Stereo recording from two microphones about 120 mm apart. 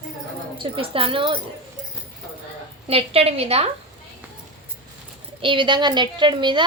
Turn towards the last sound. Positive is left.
turn(degrees=-40)  # may be behind; listen again after turning